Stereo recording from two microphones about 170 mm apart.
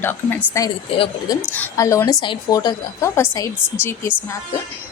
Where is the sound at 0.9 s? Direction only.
30° left (ahead or behind).